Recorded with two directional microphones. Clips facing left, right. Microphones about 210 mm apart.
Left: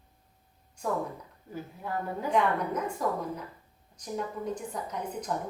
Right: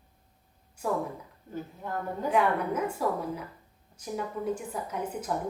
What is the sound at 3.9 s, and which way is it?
A woman's voice, 5° right (ahead or behind).